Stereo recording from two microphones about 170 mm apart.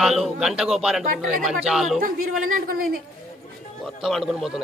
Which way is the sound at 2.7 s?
60° right (ahead or behind).